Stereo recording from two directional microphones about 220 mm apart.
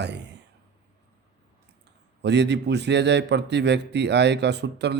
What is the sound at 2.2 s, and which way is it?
A man's voice, 50° right (ahead or behind).